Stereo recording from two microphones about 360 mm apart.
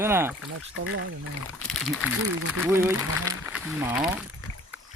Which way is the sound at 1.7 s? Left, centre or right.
Centre.